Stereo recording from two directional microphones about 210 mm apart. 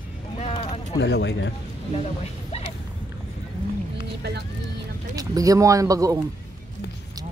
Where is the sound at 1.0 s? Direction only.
55° left (ahead or behind).